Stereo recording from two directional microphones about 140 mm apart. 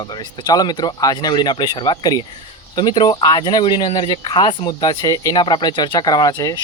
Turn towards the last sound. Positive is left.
turn(degrees=25)  # may be behind; listen again after turning